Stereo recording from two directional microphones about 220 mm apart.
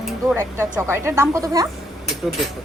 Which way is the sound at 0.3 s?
10° right (ahead or behind).